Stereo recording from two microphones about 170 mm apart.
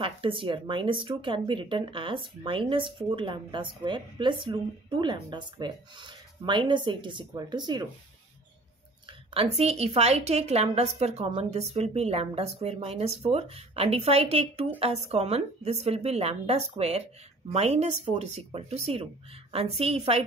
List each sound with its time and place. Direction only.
0.0 s speech: 30° right (ahead or behind)
9.3 s speech: 35° right (ahead or behind)